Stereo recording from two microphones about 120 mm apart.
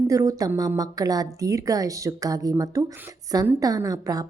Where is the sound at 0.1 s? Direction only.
30° right (ahead or behind).